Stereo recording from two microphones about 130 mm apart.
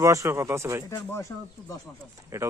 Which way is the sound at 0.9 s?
25° left (ahead or behind).